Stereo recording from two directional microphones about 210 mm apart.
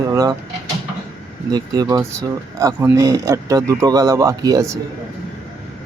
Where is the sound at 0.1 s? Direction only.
15° right (ahead or behind).